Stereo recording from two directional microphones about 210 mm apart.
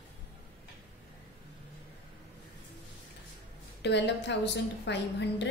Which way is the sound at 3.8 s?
55° left (ahead or behind).